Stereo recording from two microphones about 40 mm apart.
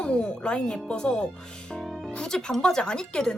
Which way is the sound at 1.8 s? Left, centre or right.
Centre.